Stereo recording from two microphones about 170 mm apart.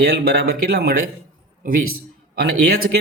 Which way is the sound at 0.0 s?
65° right (ahead or behind).